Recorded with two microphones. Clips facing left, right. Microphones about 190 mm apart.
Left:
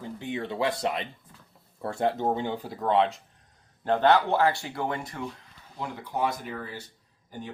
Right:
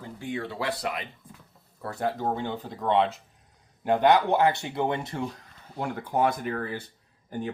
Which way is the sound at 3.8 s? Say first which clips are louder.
Right 1 dB; 15° right (ahead or behind).